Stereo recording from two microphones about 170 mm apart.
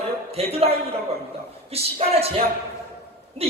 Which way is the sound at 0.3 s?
35° right (ahead or behind).